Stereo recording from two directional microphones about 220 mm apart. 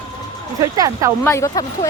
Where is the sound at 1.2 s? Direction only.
15° left (ahead or behind).